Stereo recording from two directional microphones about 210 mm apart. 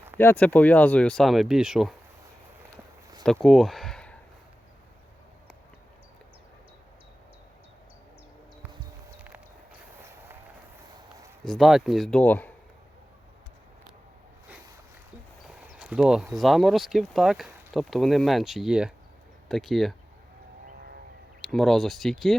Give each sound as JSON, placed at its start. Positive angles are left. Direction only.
{"t": 0.2, "sound": "speech", "side_deg": 10}
{"t": 3.4, "sound": "a sound", "side_deg": 0}
{"t": 11.4, "sound": "speech", "side_deg": 0}
{"t": 15.4, "sound": "speech", "side_deg": -5}
{"t": 20.7, "sound": "vehicle", "side_deg": -45}
{"t": 21.4, "sound": "speech", "side_deg": 0}